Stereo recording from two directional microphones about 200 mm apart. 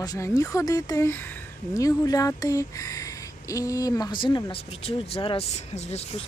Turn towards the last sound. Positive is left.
turn(degrees=30)  # may be behind; listen again after turning